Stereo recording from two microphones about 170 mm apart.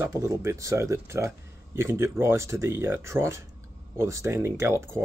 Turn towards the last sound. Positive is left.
turn(degrees=-15)  # may be behind; listen again after turning